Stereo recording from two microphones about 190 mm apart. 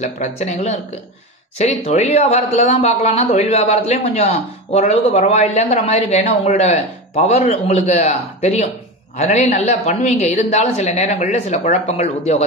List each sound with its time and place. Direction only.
0.0 s speech: 35° left (ahead or behind)